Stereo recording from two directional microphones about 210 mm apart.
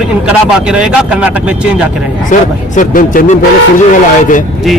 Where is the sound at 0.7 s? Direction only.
5° right (ahead or behind).